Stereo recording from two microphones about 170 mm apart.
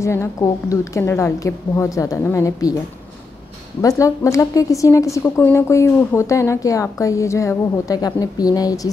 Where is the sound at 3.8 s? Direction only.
20° left (ahead or behind).